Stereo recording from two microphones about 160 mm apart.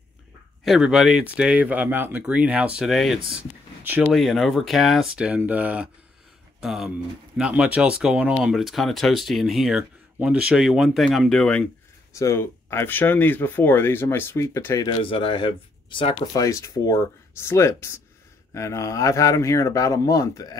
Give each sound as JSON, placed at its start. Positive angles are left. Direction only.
{"t": 0.7, "sound": "speech", "side_deg": -5}
{"t": 12.1, "sound": "speech", "side_deg": 20}
{"t": 15.0, "sound": "speech", "side_deg": 30}
{"t": 16.3, "sound": "speech", "side_deg": 20}